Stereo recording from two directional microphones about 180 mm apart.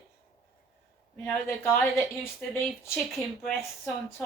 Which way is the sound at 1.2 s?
10° left (ahead or behind).